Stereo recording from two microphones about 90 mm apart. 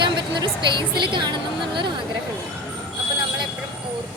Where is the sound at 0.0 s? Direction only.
60° right (ahead or behind).